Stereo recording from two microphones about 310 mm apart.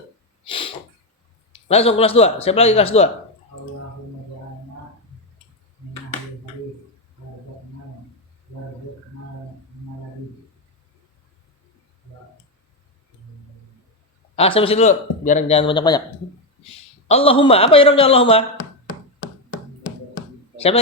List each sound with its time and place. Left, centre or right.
0.4 s sneeze: centre
1.6 s a man's voice: centre
14.3 s a man's voice: centre
17.1 s a man's voice: centre